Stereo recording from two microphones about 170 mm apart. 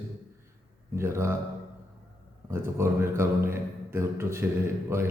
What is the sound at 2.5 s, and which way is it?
A man's voice, 15° right (ahead or behind).